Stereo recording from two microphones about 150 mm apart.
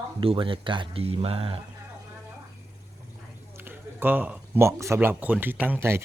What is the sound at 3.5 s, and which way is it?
Speech, 15° right (ahead or behind).